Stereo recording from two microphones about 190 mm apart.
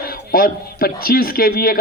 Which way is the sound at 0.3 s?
50° left (ahead or behind).